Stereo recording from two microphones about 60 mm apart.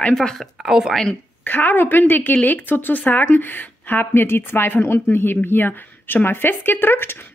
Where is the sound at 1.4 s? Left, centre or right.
Left.